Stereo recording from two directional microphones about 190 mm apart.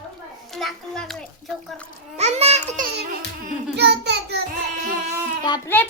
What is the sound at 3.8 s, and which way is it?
Child singing, 60° right (ahead or behind).